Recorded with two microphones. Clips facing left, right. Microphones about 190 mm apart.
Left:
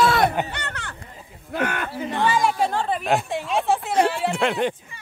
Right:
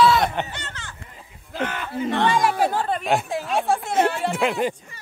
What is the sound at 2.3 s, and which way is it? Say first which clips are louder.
Speech: left 1 dB; centre (ahead or behind).